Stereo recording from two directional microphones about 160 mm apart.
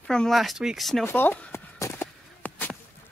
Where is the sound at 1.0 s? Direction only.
10° left (ahead or behind).